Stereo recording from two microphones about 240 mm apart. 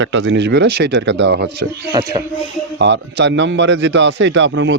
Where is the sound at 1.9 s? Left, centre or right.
Centre.